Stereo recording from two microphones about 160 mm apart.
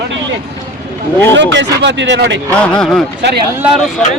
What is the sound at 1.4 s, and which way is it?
Speech, 90° right.